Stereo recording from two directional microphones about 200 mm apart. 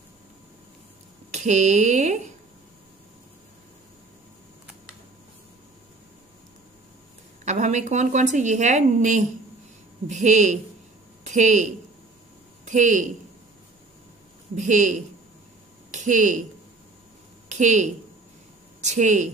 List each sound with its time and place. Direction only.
1.3 s a woman's voice: 35° right (ahead or behind)
7.4 s a woman's voice: 35° right (ahead or behind)
14.5 s a woman's voice: 35° right (ahead or behind)
17.5 s a woman's voice: 35° right (ahead or behind)